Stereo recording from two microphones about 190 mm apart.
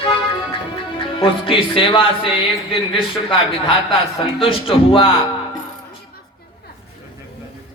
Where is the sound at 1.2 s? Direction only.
25° left (ahead or behind).